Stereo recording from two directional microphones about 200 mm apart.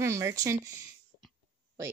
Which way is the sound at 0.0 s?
15° right (ahead or behind).